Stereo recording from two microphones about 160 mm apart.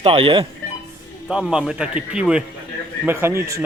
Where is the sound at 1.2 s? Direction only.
5° right (ahead or behind).